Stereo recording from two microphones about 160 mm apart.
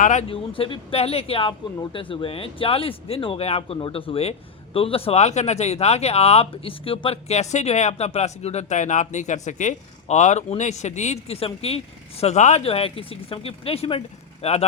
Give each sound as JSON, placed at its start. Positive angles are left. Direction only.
{"t": 0.0, "sound": "speech", "side_deg": 50}
{"t": 0.3, "sound": "speech", "side_deg": 35}